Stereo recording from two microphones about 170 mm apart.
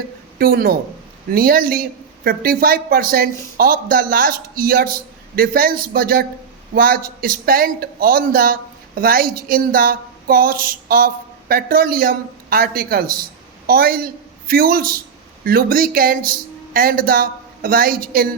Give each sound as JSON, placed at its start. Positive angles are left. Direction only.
{"t": 0.3, "sound": "a woman's voice", "side_deg": -60}